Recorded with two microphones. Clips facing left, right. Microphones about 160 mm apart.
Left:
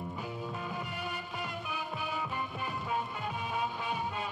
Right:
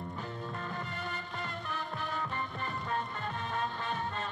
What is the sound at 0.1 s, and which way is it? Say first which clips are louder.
Music: left 1 dB; 10° left (ahead or behind).